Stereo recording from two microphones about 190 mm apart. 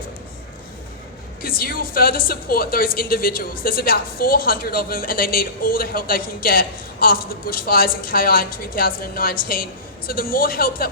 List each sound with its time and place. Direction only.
1.4 s speech: 50° left (ahead or behind)